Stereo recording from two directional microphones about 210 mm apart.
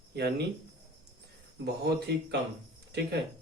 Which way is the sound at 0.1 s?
50° right (ahead or behind).